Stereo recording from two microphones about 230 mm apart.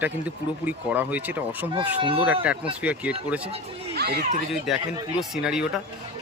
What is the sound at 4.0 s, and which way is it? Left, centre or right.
Speech, right.